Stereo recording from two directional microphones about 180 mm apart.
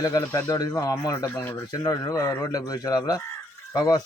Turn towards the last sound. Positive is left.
turn(degrees=20)  # may be behind; listen again after turning